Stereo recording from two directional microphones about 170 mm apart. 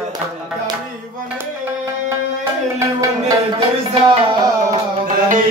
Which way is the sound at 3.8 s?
30° right (ahead or behind).